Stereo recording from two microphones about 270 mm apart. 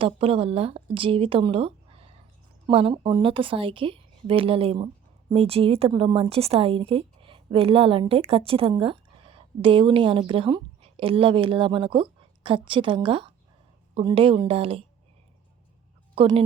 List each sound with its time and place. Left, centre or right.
0.0 s a woman's voice: right
16.1 s speech: right